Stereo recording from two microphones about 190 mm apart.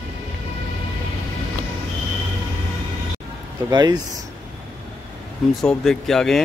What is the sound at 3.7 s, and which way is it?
Speech, 20° right (ahead or behind).